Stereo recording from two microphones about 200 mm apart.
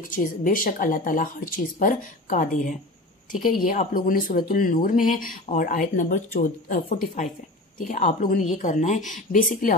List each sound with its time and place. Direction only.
0.0 s speech: 40° left (ahead or behind)